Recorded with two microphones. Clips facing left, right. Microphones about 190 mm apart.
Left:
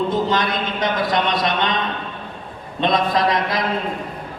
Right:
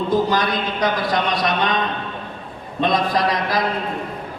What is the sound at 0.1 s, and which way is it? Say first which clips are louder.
A man's voice: right 1 dB; 25° left (ahead or behind).